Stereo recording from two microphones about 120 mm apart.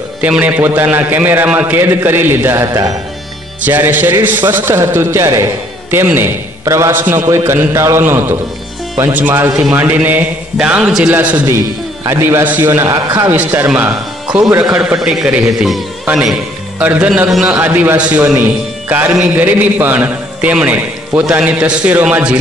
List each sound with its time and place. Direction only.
0.2 s a man's voice: 15° right (ahead or behind)
14.8 s a man's voice: 10° right (ahead or behind)